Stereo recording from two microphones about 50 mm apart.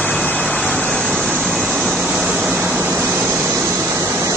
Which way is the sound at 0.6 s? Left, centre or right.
Centre.